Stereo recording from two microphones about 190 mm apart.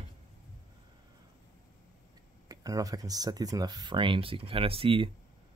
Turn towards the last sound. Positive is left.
turn(degrees=-30)  # may be behind; listen again after turning